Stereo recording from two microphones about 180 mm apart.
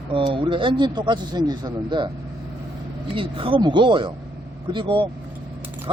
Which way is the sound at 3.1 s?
30° right (ahead or behind).